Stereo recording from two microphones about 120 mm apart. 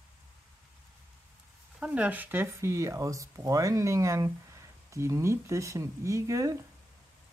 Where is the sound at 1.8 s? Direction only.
10° right (ahead or behind); by 6.5 s 25° right (ahead or behind).